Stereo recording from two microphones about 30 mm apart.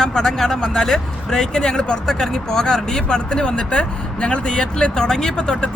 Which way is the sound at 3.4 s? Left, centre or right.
Left.